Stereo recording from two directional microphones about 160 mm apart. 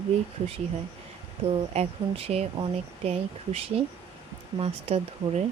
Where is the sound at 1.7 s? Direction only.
40° right (ahead or behind).